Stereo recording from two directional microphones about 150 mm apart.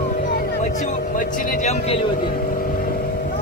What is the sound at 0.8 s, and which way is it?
Speech, 55° left (ahead or behind).